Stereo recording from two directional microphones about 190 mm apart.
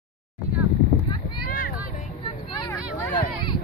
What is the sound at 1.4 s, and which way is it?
Vehicle, 50° left (ahead or behind).